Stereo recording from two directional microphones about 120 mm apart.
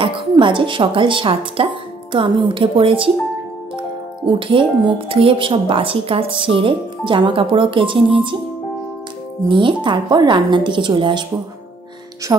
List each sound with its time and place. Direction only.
0.0 s a woman's voice: 45° right (ahead or behind)
4.3 s a woman's voice: 45° right (ahead or behind)
9.5 s a woman's voice: 40° right (ahead or behind)
12.3 s speech: 30° right (ahead or behind)